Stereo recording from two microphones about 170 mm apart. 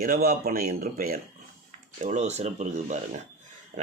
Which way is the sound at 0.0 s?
60° right (ahead or behind).